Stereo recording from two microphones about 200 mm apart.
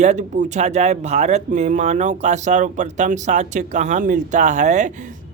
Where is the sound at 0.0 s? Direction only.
35° right (ahead or behind).